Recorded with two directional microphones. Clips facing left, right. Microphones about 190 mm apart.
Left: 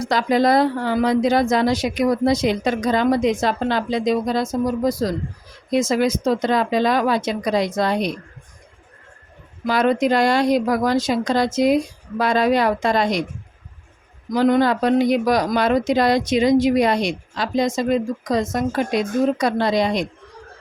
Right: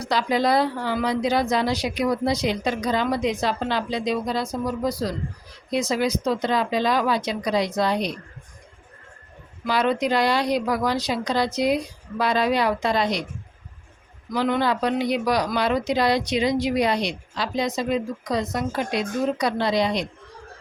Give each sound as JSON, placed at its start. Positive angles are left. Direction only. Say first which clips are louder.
{"t": 0.0, "sound": "speech", "louder": "left 4 dB", "side_deg": 50}
{"t": 9.6, "sound": "speech", "louder": "left 4 dB", "side_deg": 50}
{"t": 14.3, "sound": "speech", "louder": "left 6 dB", "side_deg": 40}